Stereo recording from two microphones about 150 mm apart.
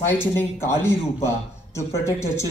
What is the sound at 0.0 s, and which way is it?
A man's voice, 15° left (ahead or behind).